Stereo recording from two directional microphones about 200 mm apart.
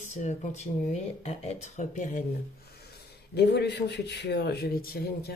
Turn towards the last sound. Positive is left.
turn(degrees=50)  # may be behind; listen again after turning